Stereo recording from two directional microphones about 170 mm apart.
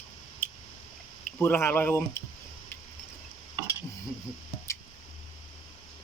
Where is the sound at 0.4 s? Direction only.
10° left (ahead or behind).